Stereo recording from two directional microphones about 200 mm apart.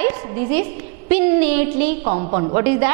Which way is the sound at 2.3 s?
15° right (ahead or behind).